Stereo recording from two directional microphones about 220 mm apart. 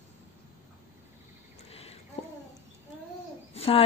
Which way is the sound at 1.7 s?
25° left (ahead or behind).